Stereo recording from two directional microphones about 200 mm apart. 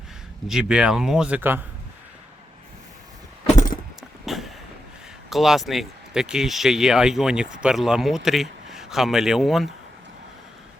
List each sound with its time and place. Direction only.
0.4 s speech: 5° right (ahead or behind)
3.5 s keys jangling: 40° left (ahead or behind)
4.3 s vehicle: centre (ahead or behind)
5.3 s speech: centre (ahead or behind)